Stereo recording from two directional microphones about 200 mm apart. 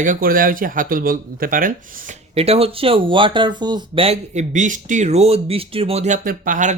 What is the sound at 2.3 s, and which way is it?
Speech, 30° right (ahead or behind).